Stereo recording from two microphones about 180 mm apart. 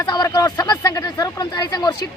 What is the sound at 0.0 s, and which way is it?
A woman's voice, 20° left (ahead or behind).